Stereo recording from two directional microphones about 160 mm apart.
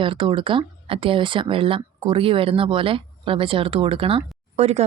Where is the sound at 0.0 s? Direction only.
30° right (ahead or behind).